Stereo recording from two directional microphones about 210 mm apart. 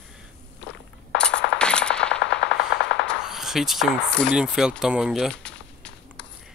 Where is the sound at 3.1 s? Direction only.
Centre (ahead or behind).